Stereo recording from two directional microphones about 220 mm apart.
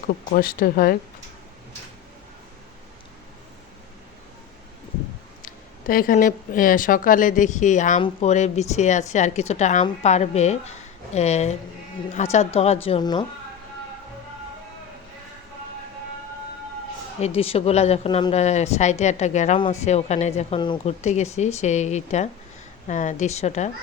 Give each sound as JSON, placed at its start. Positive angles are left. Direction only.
{"t": 0.3, "sound": "speech", "side_deg": 40}
{"t": 5.4, "sound": "a woman's voice", "side_deg": 40}
{"t": 17.2, "sound": "speech", "side_deg": 25}